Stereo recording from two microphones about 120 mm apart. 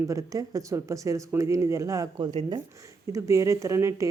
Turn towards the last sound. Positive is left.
turn(degrees=-25)  # may be behind; listen again after turning